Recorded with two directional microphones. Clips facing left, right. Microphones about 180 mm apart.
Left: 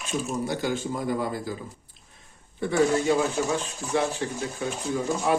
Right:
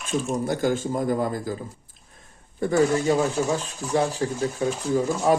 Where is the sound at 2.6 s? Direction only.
45° right (ahead or behind).